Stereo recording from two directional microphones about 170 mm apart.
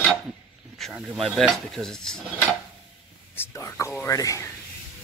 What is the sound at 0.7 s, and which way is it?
Speech, centre (ahead or behind).